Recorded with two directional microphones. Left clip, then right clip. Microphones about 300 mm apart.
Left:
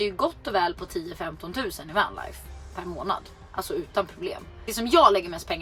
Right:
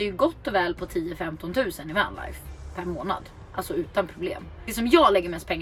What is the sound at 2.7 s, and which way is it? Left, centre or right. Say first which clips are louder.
Speech: even; centre.